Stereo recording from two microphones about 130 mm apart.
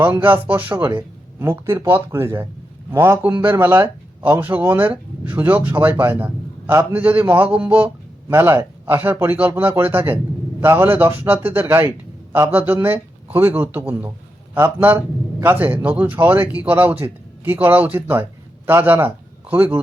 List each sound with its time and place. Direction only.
0.0 s a man's voice: 15° right (ahead or behind)